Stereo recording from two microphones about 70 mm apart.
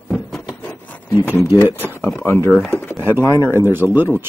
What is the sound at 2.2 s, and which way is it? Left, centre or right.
Speech, left.